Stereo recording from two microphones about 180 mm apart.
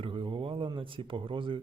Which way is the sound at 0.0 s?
30° right (ahead or behind).